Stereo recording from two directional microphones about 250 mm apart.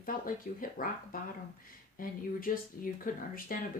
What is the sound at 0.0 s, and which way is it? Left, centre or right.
Speech, left.